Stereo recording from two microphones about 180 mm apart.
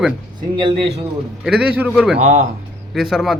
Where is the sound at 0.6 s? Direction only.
30° right (ahead or behind).